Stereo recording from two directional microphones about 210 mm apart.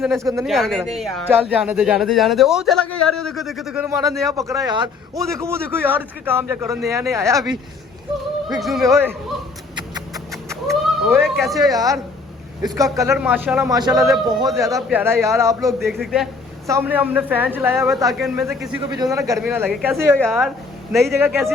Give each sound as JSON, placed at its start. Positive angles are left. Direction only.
{"t": 0.0, "sound": "speech", "side_deg": 0}
{"t": 3.8, "sound": "a man's voice", "side_deg": -15}
{"t": 8.4, "sound": "speech", "side_deg": 0}
{"t": 10.7, "sound": "a sound", "side_deg": 0}
{"t": 11.7, "sound": "a man's voice", "side_deg": -15}
{"t": 13.7, "sound": "a man's voice", "side_deg": -20}
{"t": 15.9, "sound": "speech", "side_deg": 0}
{"t": 16.6, "sound": "a man's voice", "side_deg": -10}
{"t": 21.0, "sound": "a man's voice", "side_deg": -15}